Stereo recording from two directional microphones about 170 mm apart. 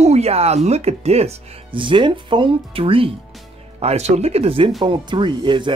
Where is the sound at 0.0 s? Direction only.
40° right (ahead or behind).